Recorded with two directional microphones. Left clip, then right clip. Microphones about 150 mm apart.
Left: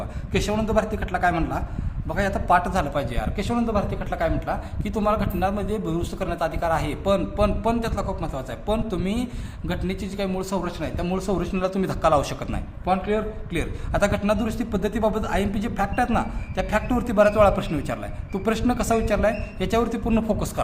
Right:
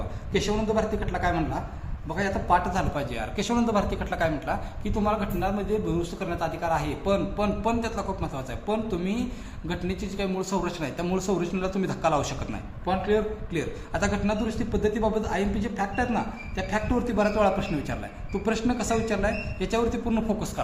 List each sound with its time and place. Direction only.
0.3 s a man's voice: 70° left (ahead or behind); by 3.2 s 45° left (ahead or behind)
3.3 s speech: 20° left (ahead or behind)
4.8 s a man's voice: 45° left (ahead or behind)